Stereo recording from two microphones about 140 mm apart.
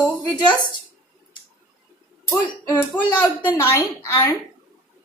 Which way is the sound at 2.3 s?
20° left (ahead or behind).